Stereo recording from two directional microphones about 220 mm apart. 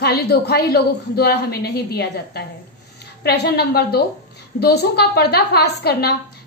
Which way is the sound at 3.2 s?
50° left (ahead or behind).